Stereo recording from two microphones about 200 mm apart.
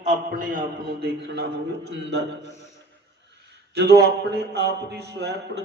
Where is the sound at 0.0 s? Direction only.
40° right (ahead or behind); by 1.5 s 60° right (ahead or behind).